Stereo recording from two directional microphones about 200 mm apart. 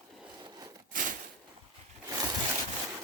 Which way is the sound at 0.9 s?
45° right (ahead or behind).